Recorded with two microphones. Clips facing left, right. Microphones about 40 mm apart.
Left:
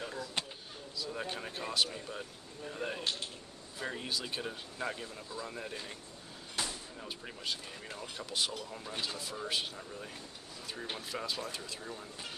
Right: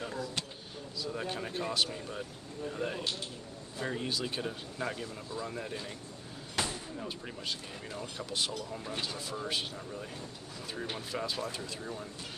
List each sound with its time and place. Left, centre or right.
0.0 s vehicle: centre
0.9 s speech: centre
6.6 s vehicle: right
7.0 s speech: centre